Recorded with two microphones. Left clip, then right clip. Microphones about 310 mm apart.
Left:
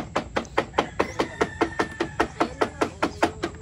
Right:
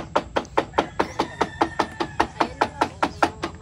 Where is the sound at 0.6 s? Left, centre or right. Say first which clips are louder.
Right 1 dB; right.